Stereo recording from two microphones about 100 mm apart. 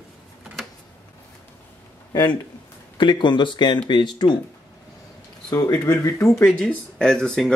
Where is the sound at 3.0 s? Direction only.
50° left (ahead or behind).